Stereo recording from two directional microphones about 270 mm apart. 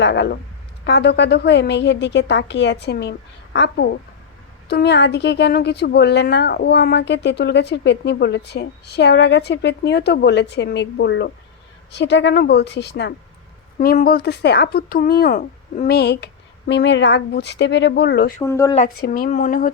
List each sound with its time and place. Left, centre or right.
0.0 s speech: left
18.4 s speech: centre
19.0 s speech: left